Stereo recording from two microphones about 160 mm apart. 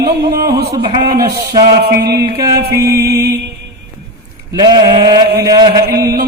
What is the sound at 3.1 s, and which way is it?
Music, 85° right.